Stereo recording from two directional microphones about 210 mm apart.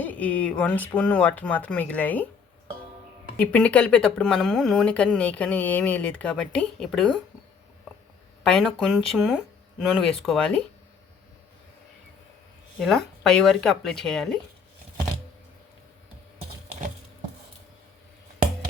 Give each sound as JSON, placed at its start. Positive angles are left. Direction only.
{"t": 0.0, "sound": "speech", "side_deg": 5}
{"t": 3.3, "sound": "speech", "side_deg": 5}
{"t": 8.4, "sound": "speech", "side_deg": 5}
{"t": 12.8, "sound": "speech", "side_deg": 0}